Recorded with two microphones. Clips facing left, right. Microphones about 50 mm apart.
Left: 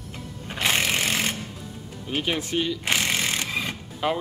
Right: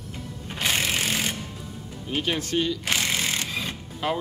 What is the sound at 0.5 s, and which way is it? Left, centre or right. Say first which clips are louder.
Music: left 2 dB; left.